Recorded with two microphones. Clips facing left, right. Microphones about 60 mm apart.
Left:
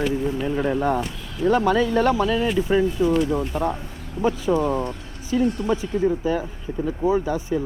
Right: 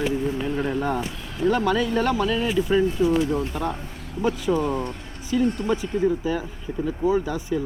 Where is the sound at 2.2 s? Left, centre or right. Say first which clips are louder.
Left 2 dB; centre.